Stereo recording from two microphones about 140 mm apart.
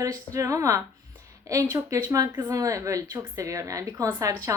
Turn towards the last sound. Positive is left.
turn(degrees=-25)  # may be behind; listen again after turning